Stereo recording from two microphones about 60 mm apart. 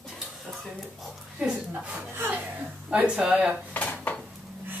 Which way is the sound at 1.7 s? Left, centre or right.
Right.